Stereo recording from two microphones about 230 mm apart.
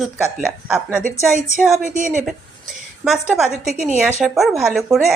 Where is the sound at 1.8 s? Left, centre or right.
Right.